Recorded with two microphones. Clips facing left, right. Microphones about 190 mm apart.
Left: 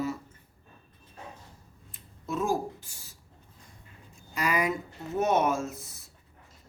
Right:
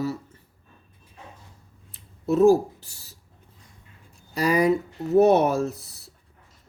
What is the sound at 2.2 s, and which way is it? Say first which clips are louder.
Speech: right 12 dB; 40° right (ahead or behind).